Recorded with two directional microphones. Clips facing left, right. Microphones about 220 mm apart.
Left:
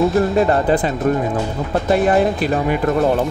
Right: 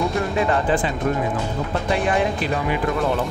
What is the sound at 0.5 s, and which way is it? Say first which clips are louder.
Speech: left 4 dB; 40° left (ahead or behind).